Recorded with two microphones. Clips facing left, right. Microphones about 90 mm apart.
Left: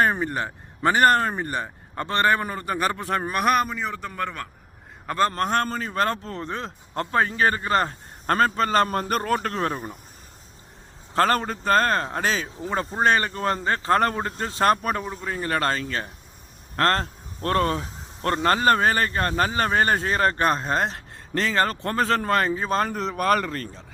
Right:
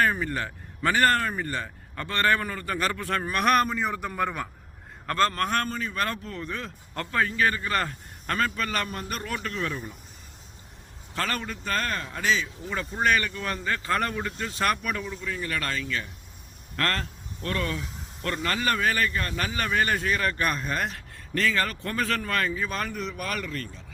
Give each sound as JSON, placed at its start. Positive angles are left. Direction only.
{"t": 0.0, "sound": "speech", "side_deg": 25}
{"t": 3.4, "sound": "a man's voice", "side_deg": 5}
{"t": 5.0, "sound": "a man's voice", "side_deg": 15}
{"t": 5.3, "sound": "speech", "side_deg": 25}
{"t": 5.6, "sound": "speech", "side_deg": 40}
{"t": 8.3, "sound": "a man's voice", "side_deg": 40}
{"t": 11.1, "sound": "speech", "side_deg": 40}